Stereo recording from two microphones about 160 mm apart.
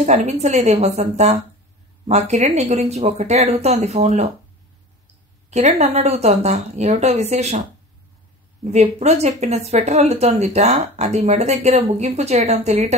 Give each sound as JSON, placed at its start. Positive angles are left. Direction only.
{"t": 0.0, "sound": "speech", "side_deg": -45}
{"t": 5.5, "sound": "speech", "side_deg": -45}
{"t": 8.6, "sound": "speech", "side_deg": -40}